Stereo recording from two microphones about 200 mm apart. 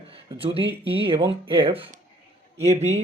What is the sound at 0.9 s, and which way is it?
Speech, 25° right (ahead or behind).